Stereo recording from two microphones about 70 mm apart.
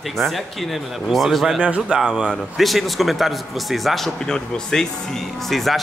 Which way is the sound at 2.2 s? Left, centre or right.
Centre.